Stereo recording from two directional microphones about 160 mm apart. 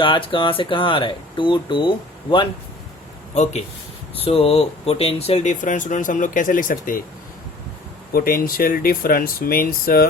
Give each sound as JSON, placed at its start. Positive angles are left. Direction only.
{"t": 0.0, "sound": "speech", "side_deg": 30}
{"t": 3.3, "sound": "speech", "side_deg": 45}
{"t": 8.1, "sound": "speech", "side_deg": 65}